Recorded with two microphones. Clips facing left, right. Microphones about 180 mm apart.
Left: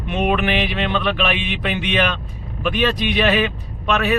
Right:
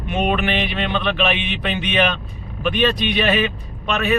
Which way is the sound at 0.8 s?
15° right (ahead or behind).